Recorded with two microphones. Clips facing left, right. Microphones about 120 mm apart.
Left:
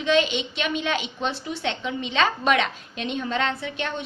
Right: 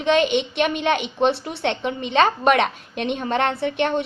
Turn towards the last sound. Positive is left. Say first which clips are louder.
# right 9 dB
turn(degrees=-60)  # may be behind; listen again after turning